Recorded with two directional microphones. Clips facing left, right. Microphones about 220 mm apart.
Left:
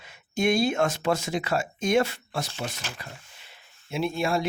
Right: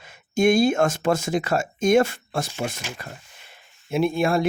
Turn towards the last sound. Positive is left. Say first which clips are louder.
# right 5 dB
turn(degrees=-55)  # may be behind; listen again after turning